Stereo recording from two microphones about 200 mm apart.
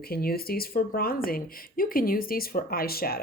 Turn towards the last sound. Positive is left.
turn(degrees=50)  # may be behind; listen again after turning